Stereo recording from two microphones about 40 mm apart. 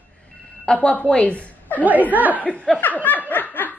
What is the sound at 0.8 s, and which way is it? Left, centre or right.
Speech, left.